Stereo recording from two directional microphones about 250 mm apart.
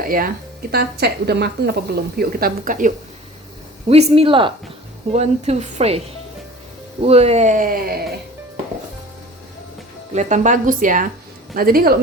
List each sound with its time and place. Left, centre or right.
0.0 s a woman's voice: right
7.0 s speech: right
10.2 s a woman's voice: right